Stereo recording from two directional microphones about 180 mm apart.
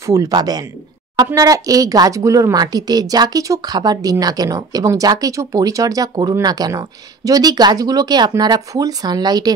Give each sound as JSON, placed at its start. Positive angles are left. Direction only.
{"t": 0.0, "sound": "speech", "side_deg": -20}